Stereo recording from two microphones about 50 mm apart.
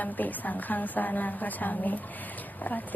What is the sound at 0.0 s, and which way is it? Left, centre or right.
A woman's voice, left.